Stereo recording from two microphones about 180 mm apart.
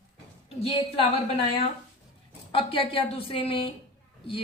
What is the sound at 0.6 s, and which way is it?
Speech, 30° left (ahead or behind).